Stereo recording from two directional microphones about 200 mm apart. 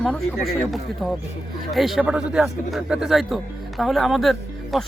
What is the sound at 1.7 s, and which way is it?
Speech, centre (ahead or behind).